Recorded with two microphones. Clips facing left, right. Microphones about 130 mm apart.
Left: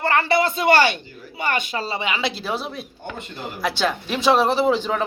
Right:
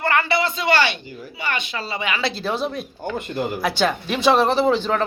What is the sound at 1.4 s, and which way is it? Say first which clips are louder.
Speech: left 3 dB; 45° left (ahead or behind).